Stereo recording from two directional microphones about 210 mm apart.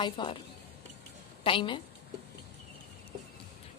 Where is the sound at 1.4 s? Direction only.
25° left (ahead or behind).